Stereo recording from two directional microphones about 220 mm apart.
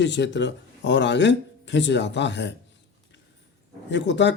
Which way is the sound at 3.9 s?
55° left (ahead or behind).